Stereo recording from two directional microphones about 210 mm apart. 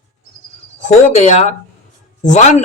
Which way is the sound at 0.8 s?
30° left (ahead or behind).